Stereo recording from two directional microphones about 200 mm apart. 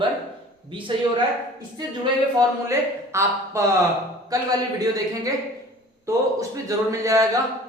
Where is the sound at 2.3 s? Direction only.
15° right (ahead or behind).